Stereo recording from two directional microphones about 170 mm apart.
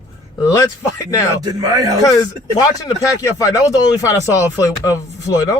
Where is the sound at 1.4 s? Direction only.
20° right (ahead or behind).